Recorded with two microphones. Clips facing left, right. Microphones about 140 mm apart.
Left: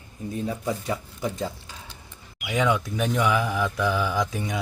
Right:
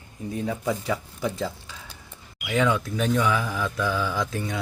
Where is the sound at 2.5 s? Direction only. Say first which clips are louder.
Even; 15° left (ahead or behind).